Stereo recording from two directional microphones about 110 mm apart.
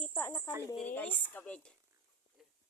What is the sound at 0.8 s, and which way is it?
Speech, 15° left (ahead or behind).